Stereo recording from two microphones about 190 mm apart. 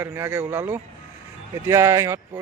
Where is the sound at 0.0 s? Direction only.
15° right (ahead or behind).